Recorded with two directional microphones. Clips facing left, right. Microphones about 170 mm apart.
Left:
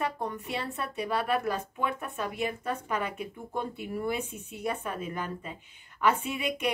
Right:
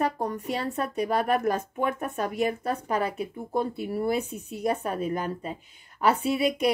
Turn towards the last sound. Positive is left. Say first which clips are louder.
# right 7 dB
turn(degrees=-35)  # may be behind; listen again after turning